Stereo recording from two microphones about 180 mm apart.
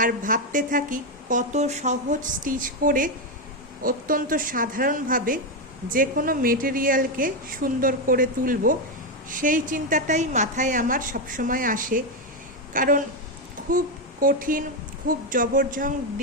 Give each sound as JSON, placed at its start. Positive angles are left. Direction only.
{"t": 0.0, "sound": "a woman's voice", "side_deg": -50}